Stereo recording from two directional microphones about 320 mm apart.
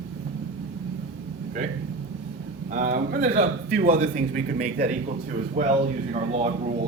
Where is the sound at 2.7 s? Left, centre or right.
Right.